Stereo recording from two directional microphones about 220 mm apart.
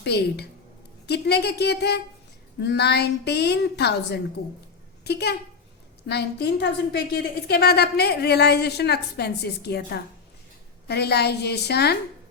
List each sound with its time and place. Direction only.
0.0 s a woman's voice: 50° left (ahead or behind)